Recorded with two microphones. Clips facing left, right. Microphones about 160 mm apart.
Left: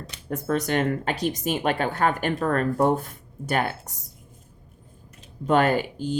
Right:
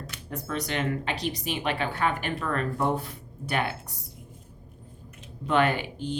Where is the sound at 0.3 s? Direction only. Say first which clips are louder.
Left 7 dB; 50° left (ahead or behind).